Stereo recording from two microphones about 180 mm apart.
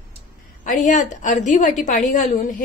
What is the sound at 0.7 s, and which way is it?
A woman's voice, 45° left (ahead or behind).